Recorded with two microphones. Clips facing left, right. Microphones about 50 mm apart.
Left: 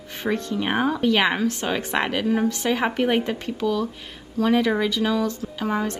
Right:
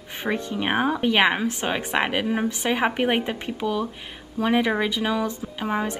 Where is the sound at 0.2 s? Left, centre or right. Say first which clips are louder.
Left 1 dB; centre.